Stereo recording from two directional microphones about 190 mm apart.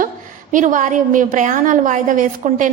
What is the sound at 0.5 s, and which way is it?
A woman's voice, 40° right (ahead or behind).